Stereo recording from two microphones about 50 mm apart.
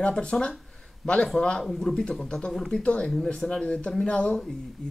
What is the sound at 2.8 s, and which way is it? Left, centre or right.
Speech, left.